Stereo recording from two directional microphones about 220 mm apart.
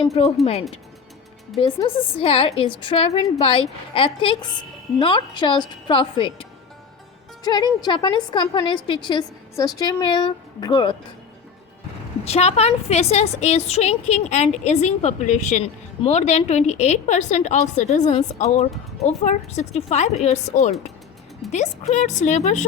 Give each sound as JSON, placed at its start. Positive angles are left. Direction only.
{"t": 0.1, "sound": "a woman's voice", "side_deg": 30}
{"t": 1.8, "sound": "a woman's voice", "side_deg": 25}
{"t": 12.2, "sound": "a woman's voice", "side_deg": 30}